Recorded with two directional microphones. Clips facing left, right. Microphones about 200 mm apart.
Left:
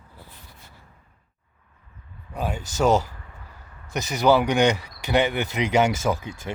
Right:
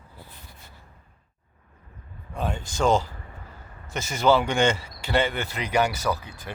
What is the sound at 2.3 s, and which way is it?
Speech, 5° left (ahead or behind).